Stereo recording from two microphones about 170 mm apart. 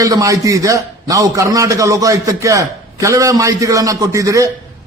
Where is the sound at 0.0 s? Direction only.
20° right (ahead or behind).